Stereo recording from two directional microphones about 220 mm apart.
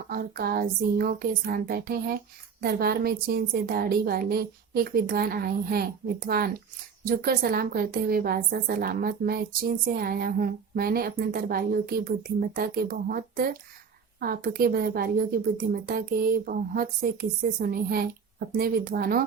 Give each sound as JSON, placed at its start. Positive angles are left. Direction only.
{"t": 0.1, "sound": "a woman's voice", "side_deg": -40}